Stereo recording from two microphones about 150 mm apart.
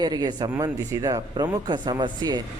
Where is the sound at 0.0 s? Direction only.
30° right (ahead or behind).